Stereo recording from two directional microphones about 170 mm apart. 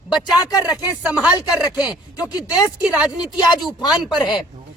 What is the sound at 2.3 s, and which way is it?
Speech, 5° right (ahead or behind).